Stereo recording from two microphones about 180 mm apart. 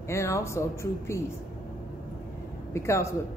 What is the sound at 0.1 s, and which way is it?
Speech, 15° left (ahead or behind).